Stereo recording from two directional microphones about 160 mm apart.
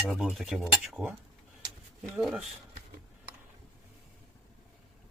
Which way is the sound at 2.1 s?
5° right (ahead or behind).